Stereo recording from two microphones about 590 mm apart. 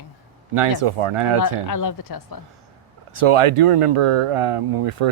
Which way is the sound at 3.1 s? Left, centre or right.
Right.